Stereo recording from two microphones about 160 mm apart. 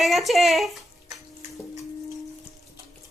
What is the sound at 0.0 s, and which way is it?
Speech, centre (ahead or behind).